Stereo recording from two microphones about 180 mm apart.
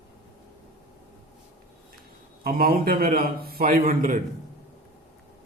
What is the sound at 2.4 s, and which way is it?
A man's voice, 55° right (ahead or behind).